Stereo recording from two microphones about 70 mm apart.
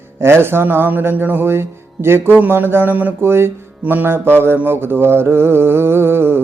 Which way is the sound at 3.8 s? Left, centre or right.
Right.